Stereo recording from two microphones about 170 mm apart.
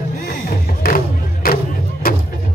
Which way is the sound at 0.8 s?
60° left (ahead or behind).